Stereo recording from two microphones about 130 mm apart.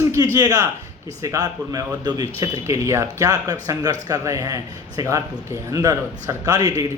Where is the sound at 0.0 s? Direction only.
20° right (ahead or behind).